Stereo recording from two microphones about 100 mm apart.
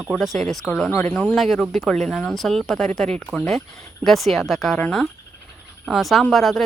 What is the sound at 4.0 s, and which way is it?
Speech, centre (ahead or behind).